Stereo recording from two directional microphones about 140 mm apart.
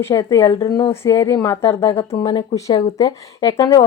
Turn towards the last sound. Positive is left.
turn(degrees=25)  # may be behind; listen again after turning